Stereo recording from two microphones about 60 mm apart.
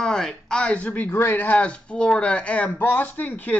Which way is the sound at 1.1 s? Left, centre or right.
Left.